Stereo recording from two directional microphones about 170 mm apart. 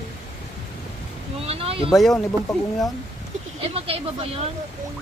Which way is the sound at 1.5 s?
35° right (ahead or behind).